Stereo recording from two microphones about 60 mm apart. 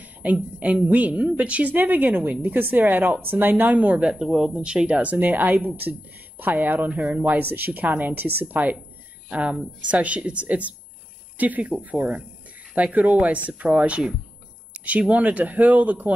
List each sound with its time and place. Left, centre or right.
0.0 s a woman's voice: right
4.0 s speech: centre